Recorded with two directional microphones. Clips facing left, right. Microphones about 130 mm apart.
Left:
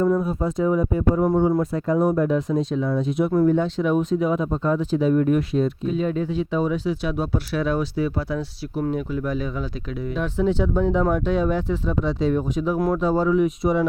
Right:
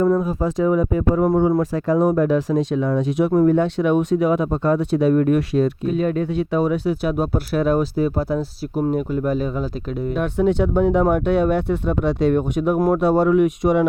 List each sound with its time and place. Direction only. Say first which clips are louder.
0.2 s speech: right 3 dB; 90° right
3.3 s speech: right 3 dB; 60° right (ahead or behind); by 10.1 s 40° right (ahead or behind)
10.2 s speech: right 3 dB; 60° right (ahead or behind)